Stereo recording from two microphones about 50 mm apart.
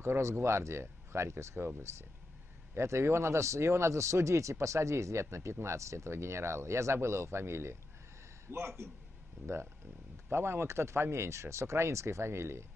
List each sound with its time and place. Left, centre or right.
0.0 s speech: right
1.9 s speech: right
2.7 s speech: right
5.3 s a man's voice: right
10.3 s speech: right